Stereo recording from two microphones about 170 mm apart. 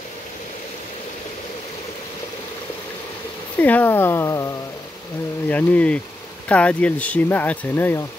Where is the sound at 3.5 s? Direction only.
10° left (ahead or behind).